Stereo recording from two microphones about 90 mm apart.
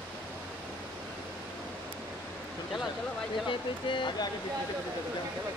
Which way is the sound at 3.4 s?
65° left (ahead or behind).